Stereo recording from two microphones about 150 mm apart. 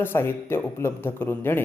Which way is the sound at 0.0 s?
15° left (ahead or behind).